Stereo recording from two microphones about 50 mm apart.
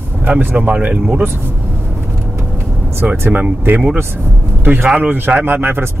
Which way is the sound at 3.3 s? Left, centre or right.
Right.